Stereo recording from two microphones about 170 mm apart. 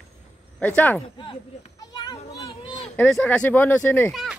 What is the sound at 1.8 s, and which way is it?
Children playing, 20° left (ahead or behind).